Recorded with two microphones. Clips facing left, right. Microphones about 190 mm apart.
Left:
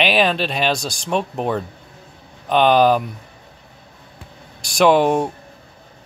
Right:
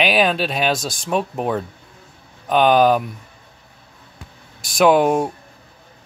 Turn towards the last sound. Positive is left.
turn(degrees=0)  # may be behind; listen again after turning